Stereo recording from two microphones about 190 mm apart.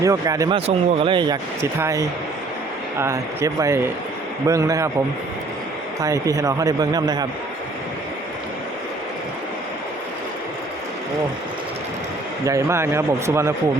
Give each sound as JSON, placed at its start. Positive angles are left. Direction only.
{"t": 0.0, "sound": "a man's voice", "side_deg": -15}
{"t": 6.0, "sound": "a man's voice", "side_deg": -20}
{"t": 12.5, "sound": "a man's voice", "side_deg": -15}